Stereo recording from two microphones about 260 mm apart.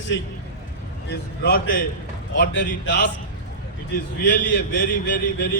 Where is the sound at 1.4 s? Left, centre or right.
Left.